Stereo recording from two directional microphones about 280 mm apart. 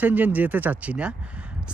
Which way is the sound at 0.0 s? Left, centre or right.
Centre.